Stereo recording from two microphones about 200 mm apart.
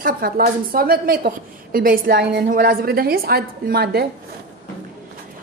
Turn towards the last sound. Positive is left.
turn(degrees=-55)  # may be behind; listen again after turning